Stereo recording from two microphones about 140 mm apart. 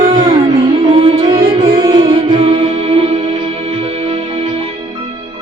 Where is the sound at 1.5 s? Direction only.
35° right (ahead or behind).